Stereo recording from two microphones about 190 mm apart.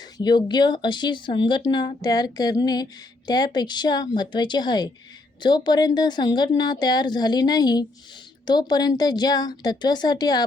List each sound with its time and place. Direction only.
0.0 s speech: 20° left (ahead or behind)